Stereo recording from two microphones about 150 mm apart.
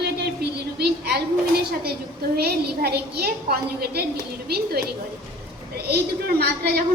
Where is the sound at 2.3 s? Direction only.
90° right.